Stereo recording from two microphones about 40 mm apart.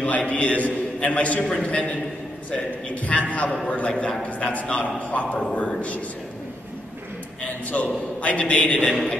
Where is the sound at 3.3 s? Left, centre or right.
Left.